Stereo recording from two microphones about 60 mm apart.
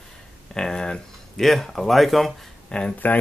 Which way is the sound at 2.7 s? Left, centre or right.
Centre.